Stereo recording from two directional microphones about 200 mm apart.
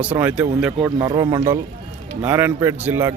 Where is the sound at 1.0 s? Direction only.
20° right (ahead or behind).